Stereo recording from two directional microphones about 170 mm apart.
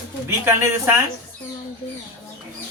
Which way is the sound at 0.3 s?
15° right (ahead or behind).